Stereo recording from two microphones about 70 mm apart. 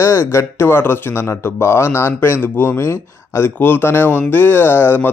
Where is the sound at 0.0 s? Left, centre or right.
Left.